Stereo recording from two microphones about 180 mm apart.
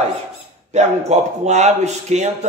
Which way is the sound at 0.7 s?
40° right (ahead or behind).